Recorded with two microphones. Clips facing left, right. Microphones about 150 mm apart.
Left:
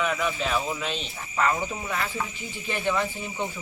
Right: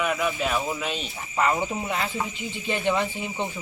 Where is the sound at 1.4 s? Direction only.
20° right (ahead or behind).